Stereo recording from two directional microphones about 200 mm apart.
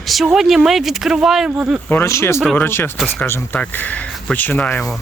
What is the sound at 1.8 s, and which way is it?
Speech, 10° left (ahead or behind).